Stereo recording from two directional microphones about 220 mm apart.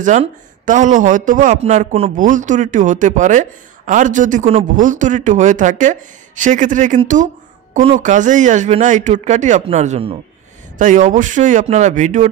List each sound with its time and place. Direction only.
0.0 s speech: 35° right (ahead or behind)